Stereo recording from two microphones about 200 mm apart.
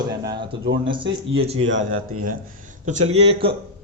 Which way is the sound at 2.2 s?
40° right (ahead or behind).